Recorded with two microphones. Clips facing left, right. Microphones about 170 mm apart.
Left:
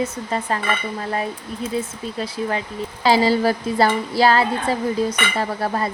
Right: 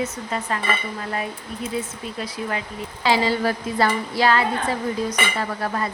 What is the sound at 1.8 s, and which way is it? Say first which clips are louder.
Speech: left 3 dB; 30° left (ahead or behind).